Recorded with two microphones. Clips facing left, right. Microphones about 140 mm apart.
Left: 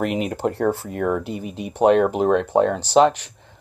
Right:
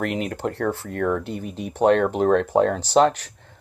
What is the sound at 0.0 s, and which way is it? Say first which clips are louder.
Speech: left 3 dB; 15° left (ahead or behind).